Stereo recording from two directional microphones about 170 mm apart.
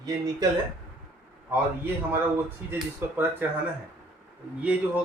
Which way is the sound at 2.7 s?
10° right (ahead or behind).